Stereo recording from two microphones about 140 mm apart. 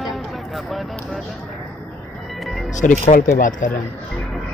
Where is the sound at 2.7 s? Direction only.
65° left (ahead or behind).